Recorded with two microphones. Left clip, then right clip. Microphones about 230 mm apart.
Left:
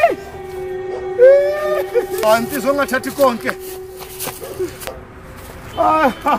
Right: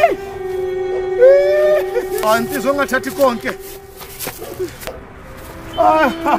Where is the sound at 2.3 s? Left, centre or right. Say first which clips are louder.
Left 1 dB; centre.